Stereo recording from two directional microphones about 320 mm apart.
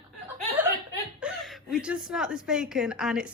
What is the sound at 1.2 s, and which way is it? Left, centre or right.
A woman's voice, centre.